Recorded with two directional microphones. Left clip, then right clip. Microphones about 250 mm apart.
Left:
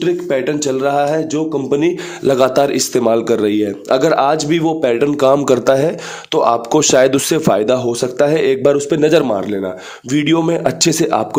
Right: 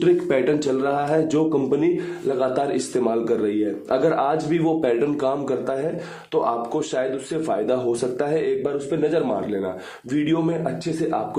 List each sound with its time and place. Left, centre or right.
0.0 s speech: centre
2.2 s a man's voice: left
10.1 s a man's voice: left